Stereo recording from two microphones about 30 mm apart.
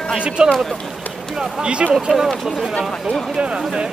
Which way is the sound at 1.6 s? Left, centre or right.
Right.